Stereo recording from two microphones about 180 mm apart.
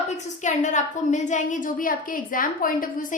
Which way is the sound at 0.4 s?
45° left (ahead or behind).